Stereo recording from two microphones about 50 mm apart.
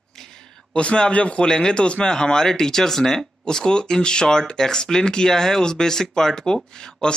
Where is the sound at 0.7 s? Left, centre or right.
Left.